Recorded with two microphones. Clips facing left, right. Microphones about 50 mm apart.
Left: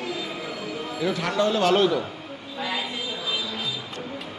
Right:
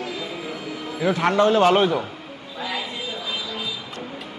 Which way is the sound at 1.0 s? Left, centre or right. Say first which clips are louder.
Right 6 dB; right.